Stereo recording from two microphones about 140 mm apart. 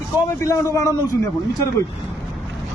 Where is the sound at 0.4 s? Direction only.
25° left (ahead or behind).